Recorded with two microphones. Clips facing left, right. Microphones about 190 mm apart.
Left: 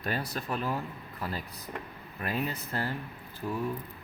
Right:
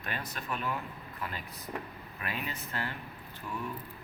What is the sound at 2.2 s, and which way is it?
Speech, 40° left (ahead or behind).